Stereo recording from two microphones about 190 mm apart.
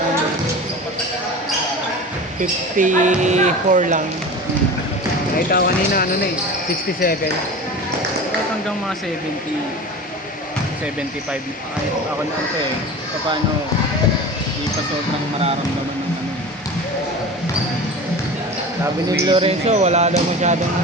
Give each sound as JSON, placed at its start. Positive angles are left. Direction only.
{"t": 2.4, "sound": "speech", "side_deg": -40}
{"t": 5.5, "sound": "speech", "side_deg": 50}
{"t": 19.2, "sound": "speech", "side_deg": -25}